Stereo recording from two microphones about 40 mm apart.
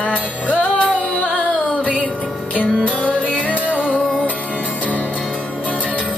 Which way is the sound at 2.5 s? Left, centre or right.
Left.